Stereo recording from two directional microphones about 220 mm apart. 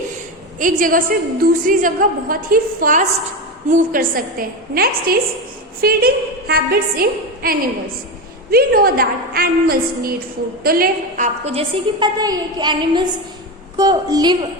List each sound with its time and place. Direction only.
0.6 s a woman's voice: 40° right (ahead or behind)
11.4 s a woman's voice: 25° right (ahead or behind)